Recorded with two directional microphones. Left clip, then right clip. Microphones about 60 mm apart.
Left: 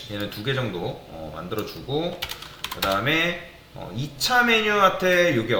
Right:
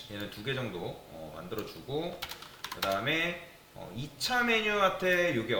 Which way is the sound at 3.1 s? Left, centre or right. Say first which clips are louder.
Left 8 dB; left.